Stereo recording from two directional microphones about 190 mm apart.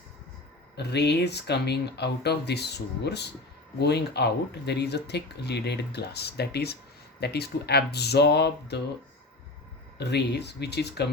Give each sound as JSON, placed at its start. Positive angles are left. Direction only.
{"t": 0.8, "sound": "speech", "side_deg": 60}
{"t": 10.0, "sound": "speech", "side_deg": 60}